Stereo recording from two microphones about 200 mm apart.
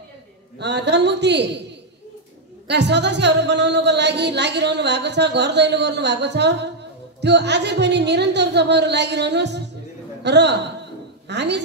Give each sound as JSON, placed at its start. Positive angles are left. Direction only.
{"t": 0.6, "sound": "speech", "side_deg": -60}
{"t": 2.7, "sound": "a woman's voice", "side_deg": -60}